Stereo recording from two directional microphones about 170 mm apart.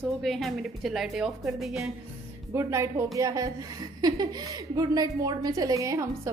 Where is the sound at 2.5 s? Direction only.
15° right (ahead or behind).